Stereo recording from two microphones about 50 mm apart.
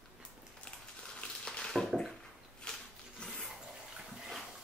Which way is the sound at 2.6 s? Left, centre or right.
Centre.